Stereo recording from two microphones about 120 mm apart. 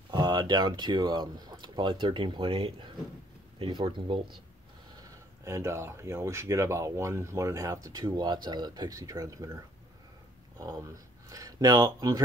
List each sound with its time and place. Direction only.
0.1 s speech: 35° right (ahead or behind)
5.4 s speech: 20° right (ahead or behind)
10.6 s speech: 30° right (ahead or behind)